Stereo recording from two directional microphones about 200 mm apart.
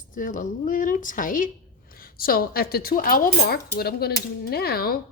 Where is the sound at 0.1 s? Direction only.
40° left (ahead or behind).